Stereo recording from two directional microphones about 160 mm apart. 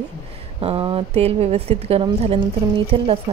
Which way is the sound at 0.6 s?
35° right (ahead or behind).